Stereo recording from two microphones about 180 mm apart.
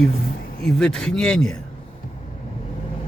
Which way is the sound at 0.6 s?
5° left (ahead or behind).